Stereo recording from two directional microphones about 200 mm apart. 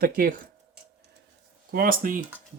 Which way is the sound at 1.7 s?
45° right (ahead or behind).